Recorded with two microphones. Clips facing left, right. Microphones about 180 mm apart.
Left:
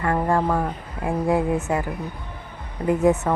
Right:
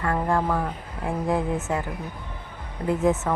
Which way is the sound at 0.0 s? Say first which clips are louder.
Left 3 dB; 10° left (ahead or behind).